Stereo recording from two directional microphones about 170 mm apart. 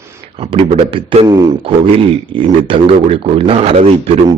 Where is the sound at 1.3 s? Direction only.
25° right (ahead or behind).